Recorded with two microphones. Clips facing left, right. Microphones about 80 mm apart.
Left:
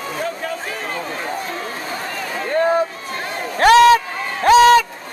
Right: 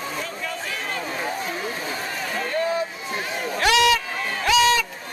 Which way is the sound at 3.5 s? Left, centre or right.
Left.